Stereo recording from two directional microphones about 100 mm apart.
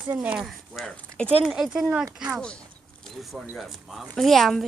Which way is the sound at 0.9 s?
10° left (ahead or behind).